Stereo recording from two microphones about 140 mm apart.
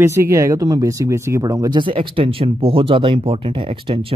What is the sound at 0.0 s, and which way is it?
Speech, 20° right (ahead or behind).